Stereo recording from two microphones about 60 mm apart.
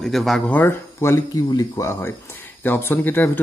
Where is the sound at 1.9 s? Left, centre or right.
Left.